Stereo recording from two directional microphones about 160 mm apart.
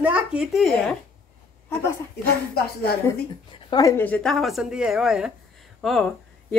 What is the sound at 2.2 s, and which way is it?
Speech, 75° left (ahead or behind).